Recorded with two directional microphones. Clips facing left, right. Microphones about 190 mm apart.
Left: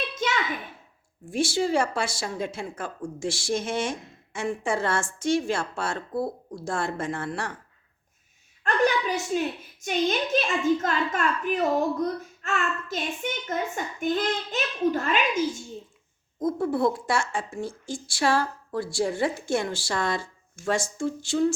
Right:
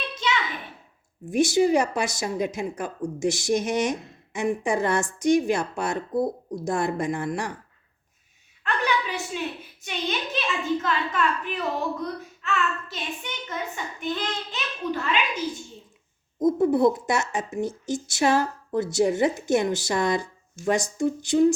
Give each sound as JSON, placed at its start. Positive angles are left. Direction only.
{"t": 1.2, "sound": "a woman's voice", "side_deg": -20}
{"t": 8.6, "sound": "a sound", "side_deg": 45}
{"t": 9.8, "sound": "a woman's voice", "side_deg": 45}
{"t": 16.4, "sound": "speech", "side_deg": -20}